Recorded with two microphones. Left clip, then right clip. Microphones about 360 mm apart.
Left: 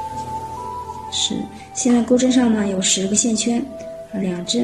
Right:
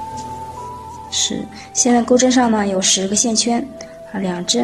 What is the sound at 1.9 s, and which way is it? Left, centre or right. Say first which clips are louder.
A woman's voice: right 3 dB; centre.